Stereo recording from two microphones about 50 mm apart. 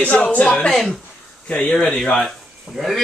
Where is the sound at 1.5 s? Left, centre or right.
Left.